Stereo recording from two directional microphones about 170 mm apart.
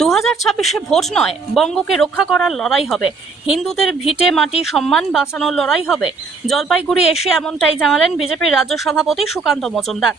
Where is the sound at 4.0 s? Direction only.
35° left (ahead or behind).